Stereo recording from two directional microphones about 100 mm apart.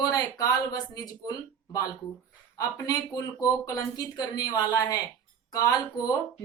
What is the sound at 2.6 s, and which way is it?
Speech, 35° left (ahead or behind).